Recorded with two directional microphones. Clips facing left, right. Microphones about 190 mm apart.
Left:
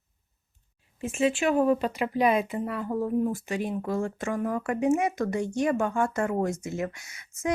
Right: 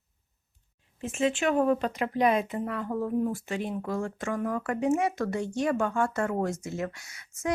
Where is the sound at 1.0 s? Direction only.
10° left (ahead or behind).